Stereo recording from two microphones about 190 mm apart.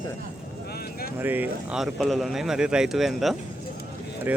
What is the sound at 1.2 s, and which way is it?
A man's voice, 10° right (ahead or behind).